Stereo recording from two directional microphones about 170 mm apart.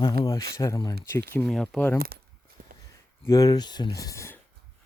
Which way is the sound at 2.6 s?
60° right (ahead or behind).